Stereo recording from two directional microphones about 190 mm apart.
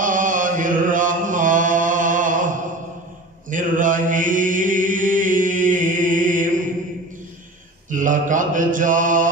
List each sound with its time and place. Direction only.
0.0 s chant: 45° right (ahead or behind)
3.4 s mantra: 45° right (ahead or behind)
7.9 s mantra: 45° right (ahead or behind)